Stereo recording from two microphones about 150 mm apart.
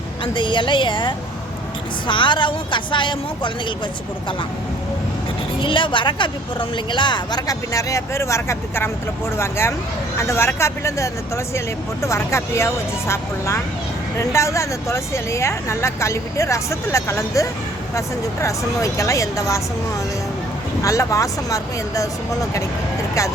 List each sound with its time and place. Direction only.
0.3 s a woman's voice: 30° left (ahead or behind)
5.5 s a woman's voice: 35° left (ahead or behind)
20.8 s speech: 20° left (ahead or behind)